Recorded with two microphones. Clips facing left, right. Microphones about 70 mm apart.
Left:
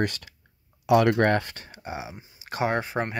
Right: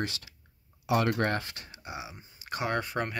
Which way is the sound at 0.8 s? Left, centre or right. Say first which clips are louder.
Left 8 dB; left.